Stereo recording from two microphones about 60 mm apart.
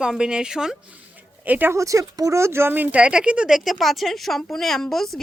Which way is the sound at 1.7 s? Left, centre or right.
Right.